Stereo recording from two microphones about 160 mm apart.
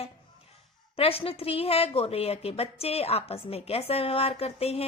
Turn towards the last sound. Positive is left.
turn(degrees=40)  # may be behind; listen again after turning